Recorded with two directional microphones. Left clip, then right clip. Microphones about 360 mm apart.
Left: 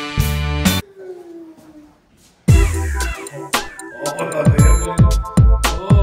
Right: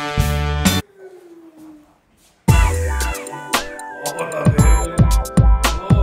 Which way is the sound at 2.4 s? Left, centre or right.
Centre.